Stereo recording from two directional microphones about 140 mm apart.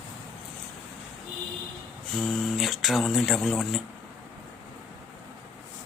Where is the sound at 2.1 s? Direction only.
Centre (ahead or behind).